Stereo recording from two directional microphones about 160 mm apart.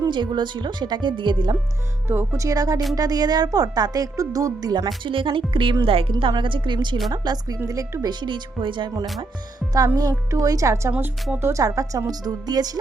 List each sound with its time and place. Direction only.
0.0 s speech: 30° right (ahead or behind)
2.0 s a woman's voice: 15° right (ahead or behind)